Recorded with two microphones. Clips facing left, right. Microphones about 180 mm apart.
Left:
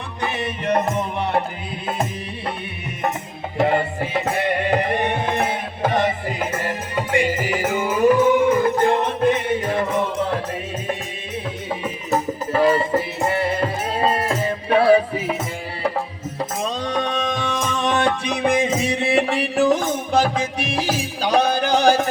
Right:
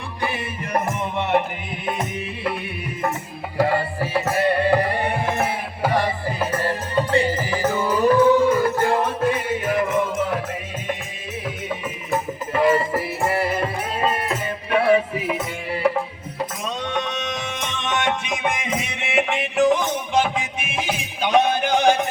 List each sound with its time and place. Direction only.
2.0 s music: 25° left (ahead or behind)
3.6 s music: 25° left (ahead or behind)
11.7 s music: 30° left (ahead or behind)
16.4 s music: 30° left (ahead or behind)